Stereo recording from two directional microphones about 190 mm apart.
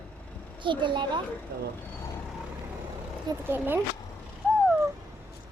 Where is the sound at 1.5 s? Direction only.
55° right (ahead or behind).